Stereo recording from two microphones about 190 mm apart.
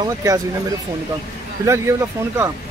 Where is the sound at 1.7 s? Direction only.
15° right (ahead or behind).